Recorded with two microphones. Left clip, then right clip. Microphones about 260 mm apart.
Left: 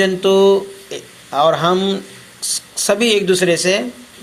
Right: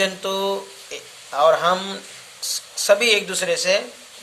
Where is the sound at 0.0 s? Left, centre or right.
Centre.